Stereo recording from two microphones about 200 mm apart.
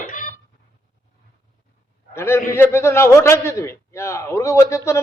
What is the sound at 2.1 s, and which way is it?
A man's voice, 10° left (ahead or behind).